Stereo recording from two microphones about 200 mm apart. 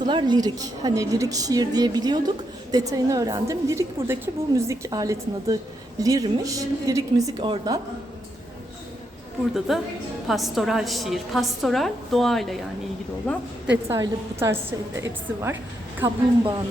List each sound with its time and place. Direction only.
0.0 s a woman's voice: 20° right (ahead or behind)
9.6 s a woman's voice: centre (ahead or behind)
13.7 s a woman's voice: 15° right (ahead or behind)